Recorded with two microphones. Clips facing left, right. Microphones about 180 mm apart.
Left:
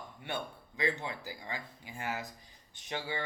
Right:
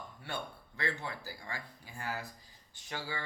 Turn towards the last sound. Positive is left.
turn(degrees=20)  # may be behind; listen again after turning